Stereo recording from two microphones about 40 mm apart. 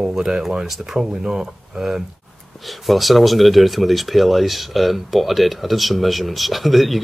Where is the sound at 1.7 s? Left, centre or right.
Centre.